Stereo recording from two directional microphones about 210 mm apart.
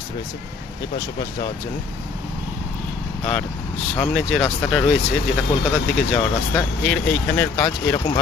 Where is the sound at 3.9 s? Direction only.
5° left (ahead or behind).